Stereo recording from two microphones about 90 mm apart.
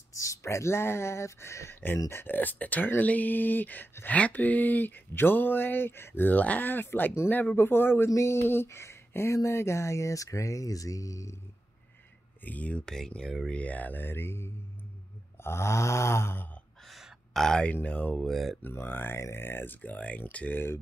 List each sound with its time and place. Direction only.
0.1 s speech: 35° left (ahead or behind)
12.4 s speech: 15° left (ahead or behind)
16.9 s a sound: 5° left (ahead or behind)
17.8 s speech: 15° left (ahead or behind)
18.2 s speech: centre (ahead or behind)
18.6 s speech: 25° left (ahead or behind)